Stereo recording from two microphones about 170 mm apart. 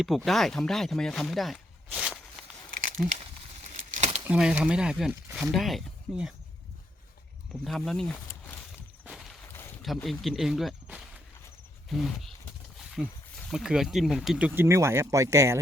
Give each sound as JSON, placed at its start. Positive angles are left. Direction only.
{"t": 0.3, "sound": "speech", "side_deg": 0}
{"t": 3.7, "sound": "a sound", "side_deg": -45}
{"t": 4.3, "sound": "speech", "side_deg": -5}
{"t": 7.6, "sound": "speech", "side_deg": 0}
{"t": 9.0, "sound": "a sound", "side_deg": 0}
{"t": 9.5, "sound": "a sound", "side_deg": 15}
{"t": 9.8, "sound": "speech", "side_deg": 0}
{"t": 11.9, "sound": "speech", "side_deg": 0}
{"t": 12.8, "sound": "wild animals", "side_deg": 0}
{"t": 13.5, "sound": "speech", "side_deg": -5}